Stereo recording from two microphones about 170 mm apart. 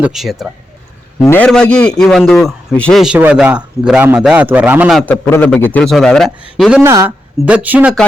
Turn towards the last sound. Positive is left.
turn(degrees=-5)  # may be behind; listen again after turning